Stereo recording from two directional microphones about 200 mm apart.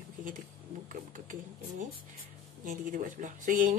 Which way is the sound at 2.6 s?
45° right (ahead or behind).